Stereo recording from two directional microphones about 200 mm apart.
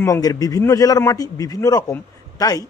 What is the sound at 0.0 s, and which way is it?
A man's voice, 15° left (ahead or behind).